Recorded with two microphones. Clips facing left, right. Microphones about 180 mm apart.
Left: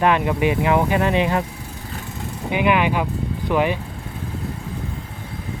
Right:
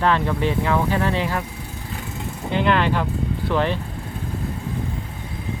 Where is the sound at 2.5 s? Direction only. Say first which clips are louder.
Left 1 dB; 10° left (ahead or behind).